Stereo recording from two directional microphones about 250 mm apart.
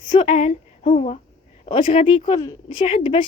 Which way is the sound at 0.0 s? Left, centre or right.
Centre.